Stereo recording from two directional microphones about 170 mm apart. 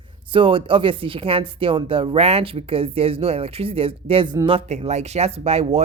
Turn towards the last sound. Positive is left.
turn(degrees=-35)  # may be behind; listen again after turning